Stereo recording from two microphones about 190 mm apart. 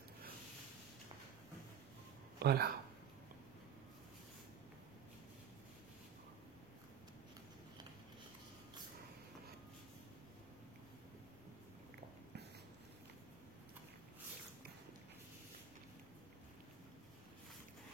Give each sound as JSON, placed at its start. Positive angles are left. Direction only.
{"t": 2.3, "sound": "speech", "side_deg": -60}